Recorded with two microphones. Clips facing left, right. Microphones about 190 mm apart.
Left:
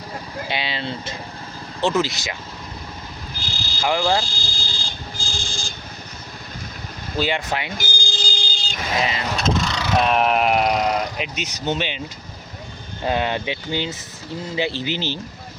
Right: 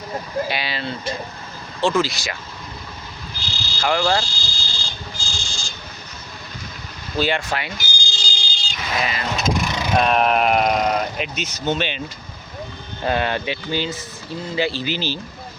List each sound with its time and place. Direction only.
0.4 s vehicle: 20° left (ahead or behind)
1.8 s speech: 20° left (ahead or behind)
3.8 s speech: 15° left (ahead or behind)
4.3 s a sound: 55° left (ahead or behind)
7.2 s speech: 15° left (ahead or behind)
7.8 s vehicle: 55° left (ahead or behind)
9.0 s speech: 25° left (ahead or behind)
9.3 s vehicle: 10° right (ahead or behind)
10.1 s speech: 15° left (ahead or behind)
10.6 s speech: 20° right (ahead or behind)
10.8 s speech: 20° left (ahead or behind)
13.1 s speech: 15° left (ahead or behind)